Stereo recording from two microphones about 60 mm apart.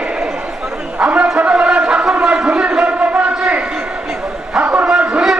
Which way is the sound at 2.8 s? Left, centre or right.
Right.